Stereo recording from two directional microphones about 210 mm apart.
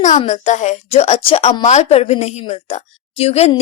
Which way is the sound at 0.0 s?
35° left (ahead or behind).